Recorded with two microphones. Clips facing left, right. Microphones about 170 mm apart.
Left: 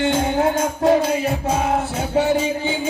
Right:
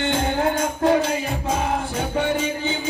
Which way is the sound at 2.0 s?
5° left (ahead or behind).